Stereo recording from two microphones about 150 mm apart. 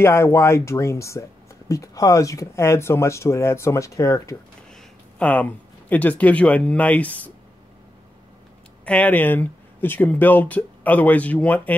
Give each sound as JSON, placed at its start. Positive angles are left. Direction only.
{"t": 0.0, "sound": "speech", "side_deg": 20}
{"t": 5.2, "sound": "speech", "side_deg": 10}
{"t": 8.8, "sound": "speech", "side_deg": 10}